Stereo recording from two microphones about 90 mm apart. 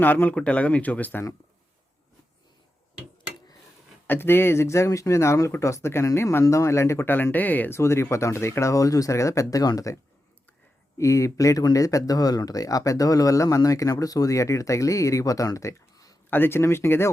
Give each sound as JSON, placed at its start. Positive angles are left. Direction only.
{"t": 0.0, "sound": "speech", "side_deg": 20}
{"t": 4.0, "sound": "speech", "side_deg": 25}
{"t": 7.8, "sound": "speech", "side_deg": 30}
{"t": 16.3, "sound": "speech", "side_deg": 25}